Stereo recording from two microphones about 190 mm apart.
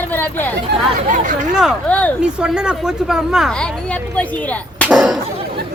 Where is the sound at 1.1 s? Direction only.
45° right (ahead or behind).